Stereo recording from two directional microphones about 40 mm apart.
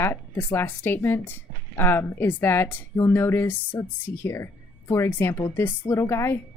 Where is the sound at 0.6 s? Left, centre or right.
Left.